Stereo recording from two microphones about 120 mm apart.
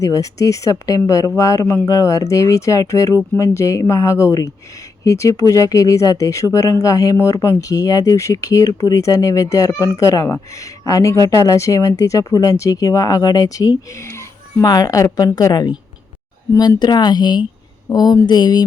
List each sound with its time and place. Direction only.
0.0 s speech: 30° left (ahead or behind)